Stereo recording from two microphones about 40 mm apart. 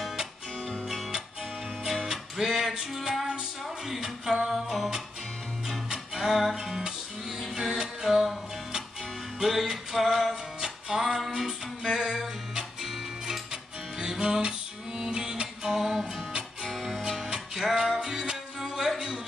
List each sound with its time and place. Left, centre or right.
0.8 s music: centre
13.9 s music: centre